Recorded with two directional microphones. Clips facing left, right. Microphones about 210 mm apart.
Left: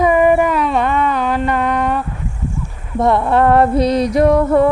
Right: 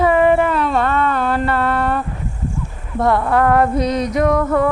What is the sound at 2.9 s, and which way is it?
Female singing, 20° left (ahead or behind).